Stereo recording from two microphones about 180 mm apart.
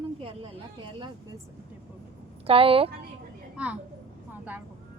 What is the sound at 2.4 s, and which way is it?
Speech, 30° right (ahead or behind).